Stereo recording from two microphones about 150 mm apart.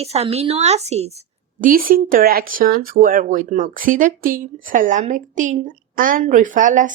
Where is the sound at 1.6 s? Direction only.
70° right (ahead or behind).